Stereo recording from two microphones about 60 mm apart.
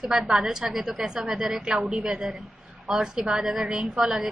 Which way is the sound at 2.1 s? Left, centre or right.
Centre.